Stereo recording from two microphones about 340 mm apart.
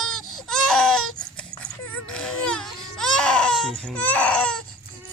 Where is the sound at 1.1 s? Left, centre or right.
Centre.